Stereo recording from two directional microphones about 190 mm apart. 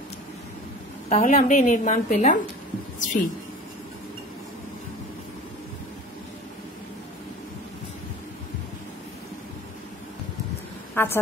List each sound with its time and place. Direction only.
1.0 s a woman's voice: 35° left (ahead or behind)
11.0 s a woman's voice: 10° left (ahead or behind)